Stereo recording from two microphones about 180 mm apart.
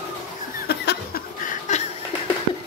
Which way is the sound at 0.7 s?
65° left (ahead or behind).